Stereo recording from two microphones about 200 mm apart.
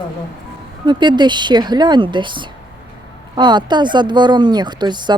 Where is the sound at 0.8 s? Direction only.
20° right (ahead or behind).